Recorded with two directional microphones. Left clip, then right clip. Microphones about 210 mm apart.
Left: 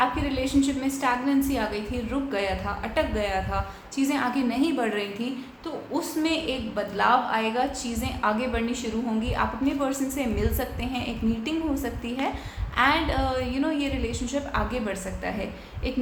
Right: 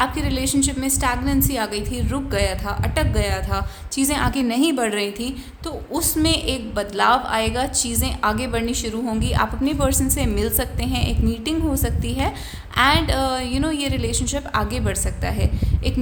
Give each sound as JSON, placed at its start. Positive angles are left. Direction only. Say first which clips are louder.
{"t": 0.0, "sound": "a woman's voice", "louder": "right 3 dB", "side_deg": -50}